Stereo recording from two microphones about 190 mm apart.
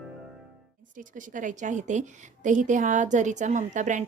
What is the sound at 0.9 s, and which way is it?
A woman's voice, 45° right (ahead or behind).